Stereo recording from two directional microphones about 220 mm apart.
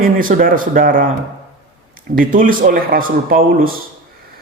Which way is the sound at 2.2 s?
40° right (ahead or behind).